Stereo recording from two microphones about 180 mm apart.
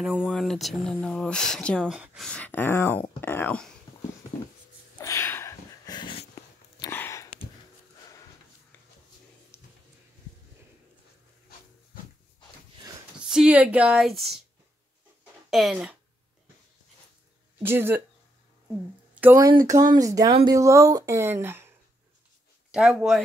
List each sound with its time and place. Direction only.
0.0 s speech: 5° right (ahead or behind)
4.9 s dog: 15° left (ahead or behind)
6.9 s a sound: 15° left (ahead or behind)
9.5 s a sound: 15° left (ahead or behind)
13.3 s speech: 5° right (ahead or behind)
15.5 s speech: centre (ahead or behind)
17.6 s speech: 10° right (ahead or behind)
19.1 s a sound: 10° right (ahead or behind)
19.4 s speech: 20° right (ahead or behind)
20.2 s speech: 30° right (ahead or behind)
20.5 s speech: 15° right (ahead or behind)
22.7 s speech: 5° right (ahead or behind)